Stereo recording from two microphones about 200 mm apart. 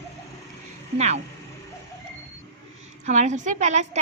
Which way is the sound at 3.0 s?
35° right (ahead or behind).